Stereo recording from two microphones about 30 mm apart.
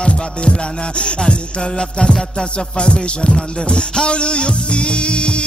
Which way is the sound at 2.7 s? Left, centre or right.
Left.